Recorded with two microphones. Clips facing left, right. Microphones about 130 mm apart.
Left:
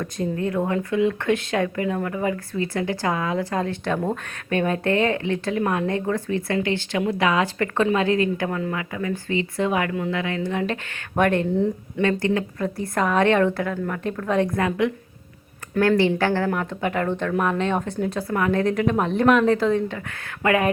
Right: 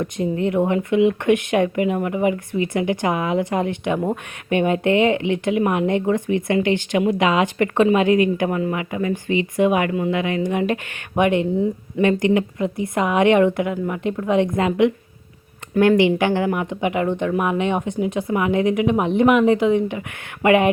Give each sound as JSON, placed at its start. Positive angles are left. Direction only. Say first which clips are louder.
{"t": 0.0, "sound": "speech", "louder": "right 4 dB", "side_deg": -20}
{"t": 11.5, "sound": "speech", "louder": "right 2 dB", "side_deg": -5}
{"t": 12.0, "sound": "speech", "louder": "right 4 dB", "side_deg": -15}